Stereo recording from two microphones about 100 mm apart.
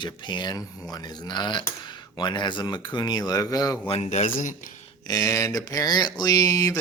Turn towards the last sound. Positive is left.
turn(degrees=35)  # may be behind; listen again after turning